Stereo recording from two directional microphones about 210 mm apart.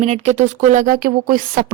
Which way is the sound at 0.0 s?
35° right (ahead or behind).